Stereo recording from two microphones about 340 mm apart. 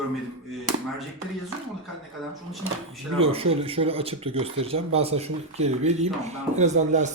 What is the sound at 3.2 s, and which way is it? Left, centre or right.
Speech, centre.